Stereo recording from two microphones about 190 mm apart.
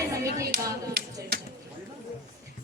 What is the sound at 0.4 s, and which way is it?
Speech, 60° right (ahead or behind).